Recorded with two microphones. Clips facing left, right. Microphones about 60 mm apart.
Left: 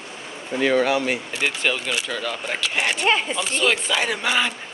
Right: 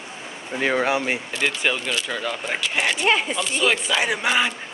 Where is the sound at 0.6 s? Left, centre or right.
Right.